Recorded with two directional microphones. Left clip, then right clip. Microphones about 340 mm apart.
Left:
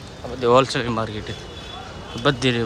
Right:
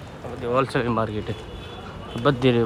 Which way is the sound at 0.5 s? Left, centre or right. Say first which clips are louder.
Right 1 dB; centre.